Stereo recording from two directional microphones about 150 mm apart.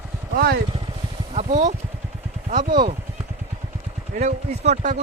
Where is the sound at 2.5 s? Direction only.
60° right (ahead or behind).